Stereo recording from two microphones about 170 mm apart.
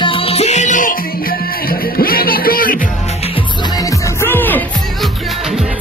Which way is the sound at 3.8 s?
15° left (ahead or behind).